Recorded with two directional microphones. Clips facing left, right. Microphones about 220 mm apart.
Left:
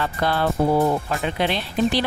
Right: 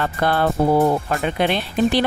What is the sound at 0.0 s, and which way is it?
Speech, 50° right (ahead or behind).